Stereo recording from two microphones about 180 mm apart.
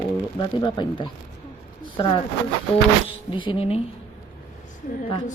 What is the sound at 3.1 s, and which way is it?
Speech, 30° left (ahead or behind).